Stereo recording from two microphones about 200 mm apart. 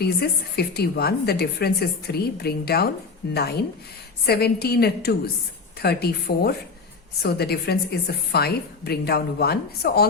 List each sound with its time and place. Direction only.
0.0 s a woman's voice: 50° left (ahead or behind)
4.3 s a woman's voice: 50° left (ahead or behind)